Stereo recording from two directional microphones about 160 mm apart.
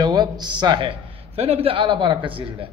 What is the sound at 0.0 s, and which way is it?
A man's voice, 25° right (ahead or behind).